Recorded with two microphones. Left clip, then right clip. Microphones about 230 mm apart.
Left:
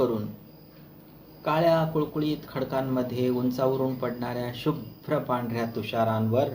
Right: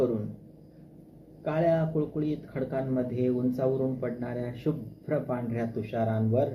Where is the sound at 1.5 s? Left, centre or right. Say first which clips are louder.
Left 4 dB; left.